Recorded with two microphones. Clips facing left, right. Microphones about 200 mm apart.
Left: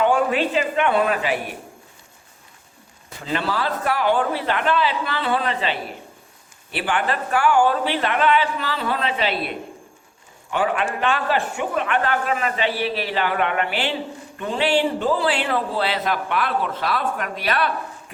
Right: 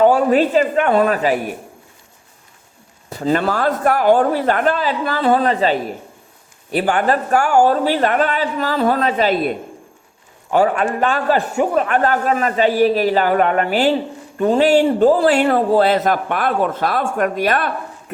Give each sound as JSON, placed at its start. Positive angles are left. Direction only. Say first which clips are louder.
{"t": 0.0, "sound": "a man's voice", "louder": "right 6 dB", "side_deg": -40}
{"t": 3.1, "sound": "a man's voice", "louder": "right 7 dB", "side_deg": -40}